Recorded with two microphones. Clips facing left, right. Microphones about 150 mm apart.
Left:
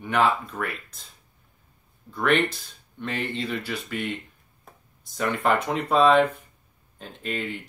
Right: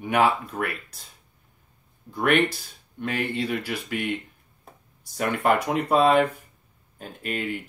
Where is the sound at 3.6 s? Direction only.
10° right (ahead or behind).